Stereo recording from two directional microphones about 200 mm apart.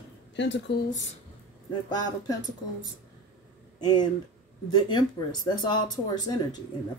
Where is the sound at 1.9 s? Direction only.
20° left (ahead or behind).